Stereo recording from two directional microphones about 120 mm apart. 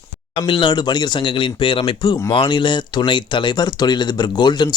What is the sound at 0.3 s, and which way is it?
Speech, 40° left (ahead or behind).